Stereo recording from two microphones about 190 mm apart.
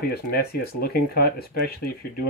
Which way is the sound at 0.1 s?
55° left (ahead or behind).